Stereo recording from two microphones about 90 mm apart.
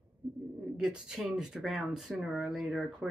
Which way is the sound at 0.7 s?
5° right (ahead or behind).